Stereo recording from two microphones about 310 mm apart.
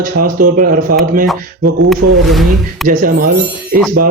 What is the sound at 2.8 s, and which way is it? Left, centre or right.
Speech, right.